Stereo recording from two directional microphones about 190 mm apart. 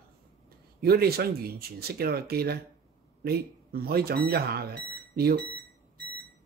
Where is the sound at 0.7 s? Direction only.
55° right (ahead or behind).